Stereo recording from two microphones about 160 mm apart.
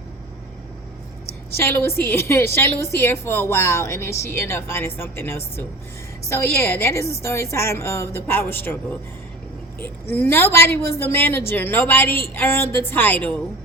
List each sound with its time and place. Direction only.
1.5 s a woman's voice: 15° left (ahead or behind)